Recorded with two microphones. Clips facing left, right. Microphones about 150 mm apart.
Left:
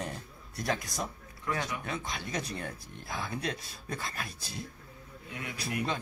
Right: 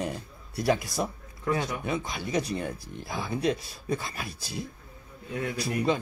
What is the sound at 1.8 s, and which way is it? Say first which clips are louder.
A man's voice: right 6 dB; 5° right (ahead or behind).